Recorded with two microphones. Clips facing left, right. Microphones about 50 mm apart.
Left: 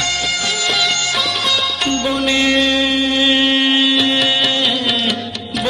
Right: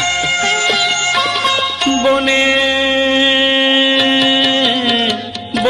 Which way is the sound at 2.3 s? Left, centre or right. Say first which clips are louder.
Right 2 dB; right.